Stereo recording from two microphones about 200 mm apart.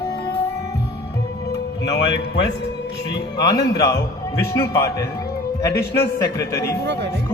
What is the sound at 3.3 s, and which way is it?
A man's voice, 20° left (ahead or behind).